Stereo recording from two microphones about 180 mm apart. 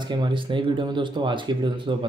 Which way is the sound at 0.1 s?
25° right (ahead or behind).